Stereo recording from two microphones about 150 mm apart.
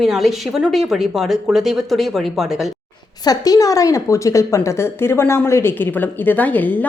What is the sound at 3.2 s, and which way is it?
A woman's voice, 25° left (ahead or behind).